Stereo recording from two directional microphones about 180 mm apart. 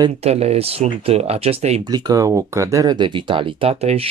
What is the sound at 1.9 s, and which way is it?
Speech, 20° right (ahead or behind).